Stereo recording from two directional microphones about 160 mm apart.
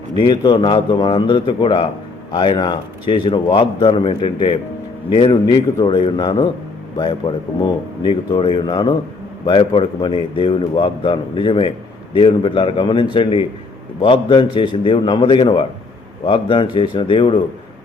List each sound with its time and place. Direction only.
0.2 s a man's voice: 30° left (ahead or behind)
5.5 s a man's voice: 15° left (ahead or behind)
5.8 s a man's voice: 30° left (ahead or behind)